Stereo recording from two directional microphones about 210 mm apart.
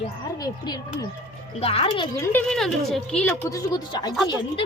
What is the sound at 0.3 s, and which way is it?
A woman's voice, 20° left (ahead or behind).